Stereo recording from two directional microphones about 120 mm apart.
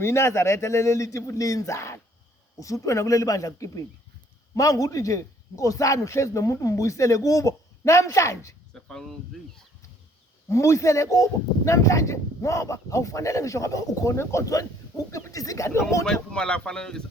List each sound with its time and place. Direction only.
0.0 s speech: 20° left (ahead or behind)
8.7 s speech: 5° left (ahead or behind)
10.5 s speech: 25° left (ahead or behind)
16.0 s speech: 5° left (ahead or behind)